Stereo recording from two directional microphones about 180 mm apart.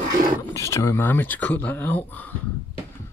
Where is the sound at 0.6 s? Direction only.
15° left (ahead or behind).